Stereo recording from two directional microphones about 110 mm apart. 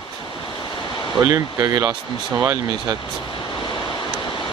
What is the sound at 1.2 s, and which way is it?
Speech, 30° right (ahead or behind).